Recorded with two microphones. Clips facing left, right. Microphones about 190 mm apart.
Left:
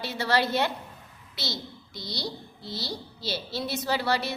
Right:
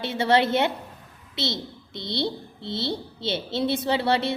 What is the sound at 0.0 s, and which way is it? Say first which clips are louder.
A child's voice: right 5 dB; 25° right (ahead or behind).